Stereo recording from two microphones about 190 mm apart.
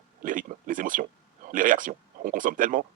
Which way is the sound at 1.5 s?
45° right (ahead or behind).